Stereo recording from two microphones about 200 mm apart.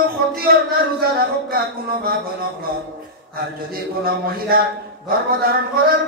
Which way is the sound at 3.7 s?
50° right (ahead or behind).